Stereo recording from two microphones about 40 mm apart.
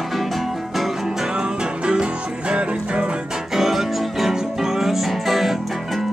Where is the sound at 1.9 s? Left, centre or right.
Right.